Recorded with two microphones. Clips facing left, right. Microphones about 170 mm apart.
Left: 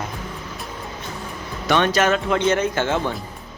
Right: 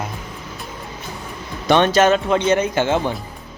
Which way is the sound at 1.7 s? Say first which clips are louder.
Right 4 dB; 25° right (ahead or behind).